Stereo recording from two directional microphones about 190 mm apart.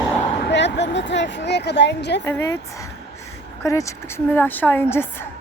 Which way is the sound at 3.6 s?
15° left (ahead or behind).